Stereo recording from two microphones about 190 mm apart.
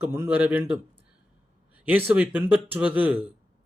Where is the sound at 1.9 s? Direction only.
10° right (ahead or behind).